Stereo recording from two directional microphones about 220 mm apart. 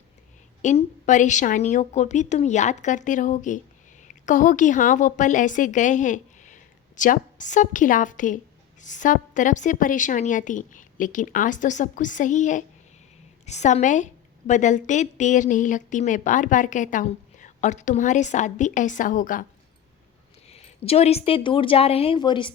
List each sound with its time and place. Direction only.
0.6 s a woman's voice: 30° left (ahead or behind)
20.5 s a woman's voice: 30° left (ahead or behind)